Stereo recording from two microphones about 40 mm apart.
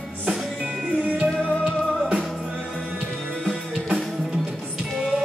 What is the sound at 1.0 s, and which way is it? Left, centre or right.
Music, right.